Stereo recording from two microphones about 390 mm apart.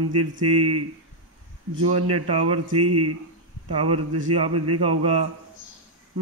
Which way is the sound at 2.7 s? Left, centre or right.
Right.